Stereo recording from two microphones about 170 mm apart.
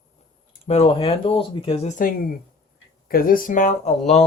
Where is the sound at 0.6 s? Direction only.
40° left (ahead or behind).